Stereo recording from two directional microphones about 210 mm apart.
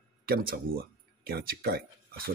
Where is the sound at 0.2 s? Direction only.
45° right (ahead or behind).